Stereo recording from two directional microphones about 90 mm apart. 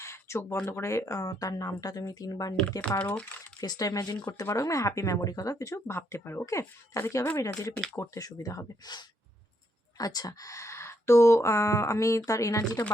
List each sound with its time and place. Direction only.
0.0 s a sound: 30° left (ahead or behind)
0.6 s speech: 35° left (ahead or behind)
3.0 s speech: 15° left (ahead or behind)
3.6 s speech: 45° left (ahead or behind)